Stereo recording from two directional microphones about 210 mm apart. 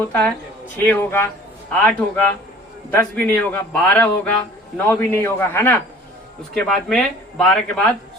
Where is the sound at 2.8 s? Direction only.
10° left (ahead or behind).